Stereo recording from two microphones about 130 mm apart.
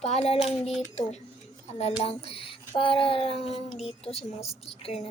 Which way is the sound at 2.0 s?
50° left (ahead or behind).